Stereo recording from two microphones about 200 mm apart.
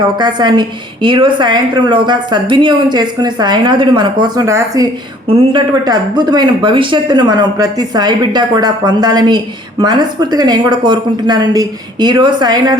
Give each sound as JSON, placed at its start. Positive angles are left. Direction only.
{"t": 0.2, "sound": "a woman's voice", "side_deg": -20}